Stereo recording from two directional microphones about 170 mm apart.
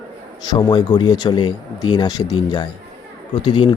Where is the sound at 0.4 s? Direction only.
25° left (ahead or behind).